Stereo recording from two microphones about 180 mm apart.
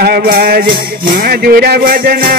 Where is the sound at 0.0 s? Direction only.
60° right (ahead or behind).